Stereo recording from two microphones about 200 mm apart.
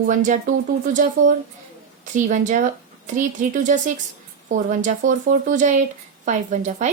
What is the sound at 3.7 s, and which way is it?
A woman's voice, 40° right (ahead or behind).